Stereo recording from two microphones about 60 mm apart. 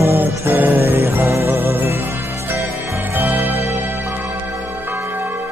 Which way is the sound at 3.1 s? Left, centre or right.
Right.